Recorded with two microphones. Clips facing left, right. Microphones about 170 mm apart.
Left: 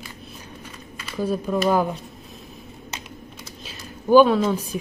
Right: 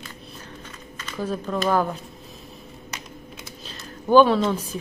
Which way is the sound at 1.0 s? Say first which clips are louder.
Left 3 dB; 10° left (ahead or behind).